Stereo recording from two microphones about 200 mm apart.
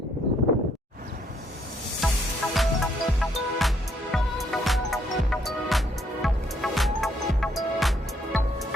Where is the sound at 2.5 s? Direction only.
Centre (ahead or behind).